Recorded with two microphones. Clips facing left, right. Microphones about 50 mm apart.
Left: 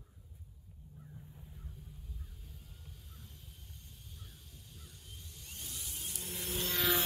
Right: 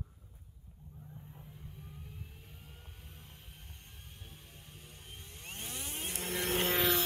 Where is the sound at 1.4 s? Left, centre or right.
Right.